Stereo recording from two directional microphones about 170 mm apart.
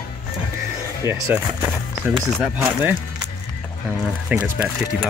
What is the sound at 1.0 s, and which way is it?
Speech, 15° right (ahead or behind).